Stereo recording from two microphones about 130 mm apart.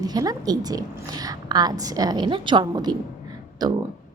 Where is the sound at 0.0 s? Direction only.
30° right (ahead or behind).